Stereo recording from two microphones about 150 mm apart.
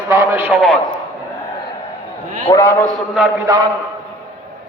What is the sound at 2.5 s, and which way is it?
Speech, 15° left (ahead or behind).